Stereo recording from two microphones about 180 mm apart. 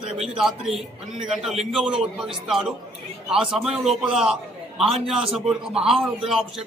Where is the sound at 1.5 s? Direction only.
35° right (ahead or behind).